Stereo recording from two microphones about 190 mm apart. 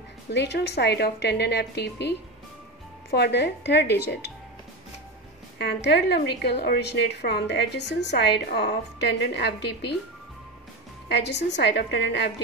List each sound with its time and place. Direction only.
0.3 s a woman's voice: 60° left (ahead or behind)
5.6 s a woman's voice: 60° left (ahead or behind)
11.1 s a woman's voice: 65° left (ahead or behind)